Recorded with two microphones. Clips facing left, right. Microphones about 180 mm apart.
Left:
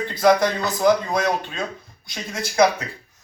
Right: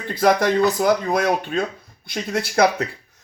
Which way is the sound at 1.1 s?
55° right (ahead or behind).